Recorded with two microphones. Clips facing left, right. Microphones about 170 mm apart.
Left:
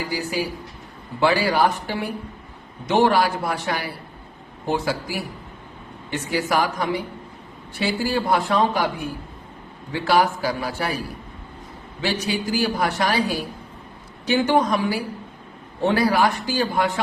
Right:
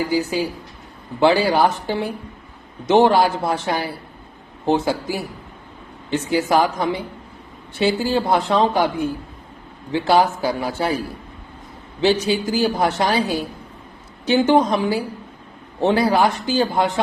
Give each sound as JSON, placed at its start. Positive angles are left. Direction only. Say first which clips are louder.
{"t": 0.1, "sound": "a woman's voice", "louder": "right 5 dB", "side_deg": -25}
{"t": 12.0, "sound": "a woman's voice", "louder": "right 6 dB", "side_deg": -25}